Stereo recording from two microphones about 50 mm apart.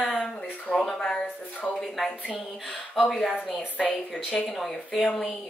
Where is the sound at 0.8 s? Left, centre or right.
Centre.